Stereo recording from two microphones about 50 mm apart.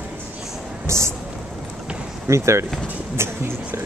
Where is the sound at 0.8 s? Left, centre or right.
Right.